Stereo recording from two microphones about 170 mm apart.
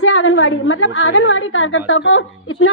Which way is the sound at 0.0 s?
90° left.